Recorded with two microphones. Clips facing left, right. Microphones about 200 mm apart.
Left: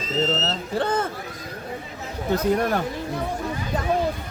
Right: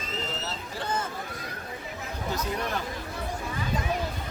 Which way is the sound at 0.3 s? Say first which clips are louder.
Left 10 dB; 65° left (ahead or behind).